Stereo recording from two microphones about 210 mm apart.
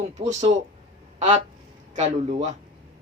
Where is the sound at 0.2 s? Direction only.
30° right (ahead or behind).